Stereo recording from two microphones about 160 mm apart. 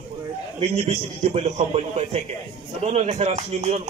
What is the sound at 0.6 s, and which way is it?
A man's voice, 40° right (ahead or behind).